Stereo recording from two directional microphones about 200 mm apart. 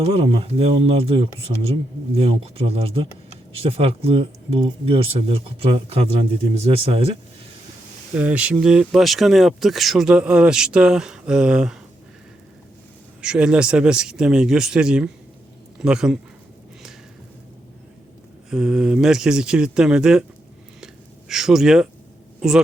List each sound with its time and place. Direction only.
0.0 s speech: 30° right (ahead or behind)
8.1 s speech: 5° right (ahead or behind)
13.2 s speech: 5° right (ahead or behind)
18.5 s speech: 5° right (ahead or behind)
20.8 s a sound: centre (ahead or behind)
22.4 s speech: 5° right (ahead or behind)